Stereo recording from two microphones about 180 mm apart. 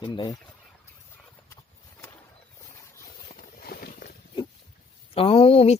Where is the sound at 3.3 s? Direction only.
55° left (ahead or behind).